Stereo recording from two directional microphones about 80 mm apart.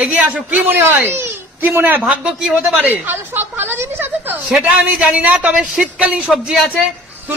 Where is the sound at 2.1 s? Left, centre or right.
Centre.